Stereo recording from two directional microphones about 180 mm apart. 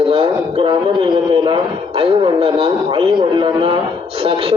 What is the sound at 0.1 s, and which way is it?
A man's voice, 30° right (ahead or behind).